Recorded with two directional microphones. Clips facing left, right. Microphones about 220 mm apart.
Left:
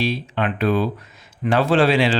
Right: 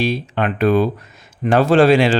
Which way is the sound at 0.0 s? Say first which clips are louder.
Right 3 dB; 50° right (ahead or behind).